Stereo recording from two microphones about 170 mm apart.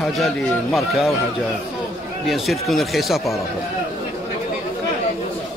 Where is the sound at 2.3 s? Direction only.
Centre (ahead or behind).